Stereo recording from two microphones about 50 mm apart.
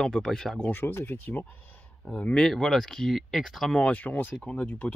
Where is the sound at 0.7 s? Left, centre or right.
Left.